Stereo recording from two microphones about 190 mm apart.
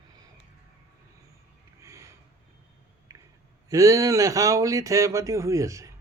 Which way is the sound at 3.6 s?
15° right (ahead or behind).